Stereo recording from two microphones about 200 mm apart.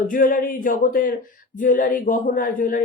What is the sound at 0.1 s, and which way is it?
A woman's voice, 45° left (ahead or behind).